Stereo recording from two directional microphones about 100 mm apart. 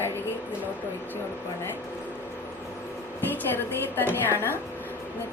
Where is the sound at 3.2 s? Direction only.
20° left (ahead or behind).